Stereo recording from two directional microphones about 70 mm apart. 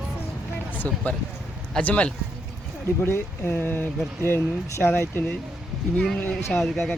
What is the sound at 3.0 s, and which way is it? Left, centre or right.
Speech, left.